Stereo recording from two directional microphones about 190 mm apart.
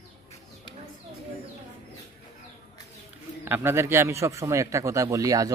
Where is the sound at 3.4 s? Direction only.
10° right (ahead or behind).